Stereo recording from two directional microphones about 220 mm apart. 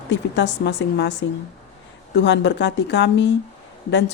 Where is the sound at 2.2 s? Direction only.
55° left (ahead or behind).